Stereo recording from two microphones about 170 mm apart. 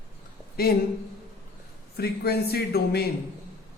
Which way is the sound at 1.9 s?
70° left (ahead or behind).